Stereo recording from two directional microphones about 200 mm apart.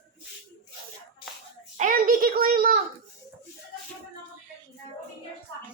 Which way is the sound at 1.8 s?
45° right (ahead or behind).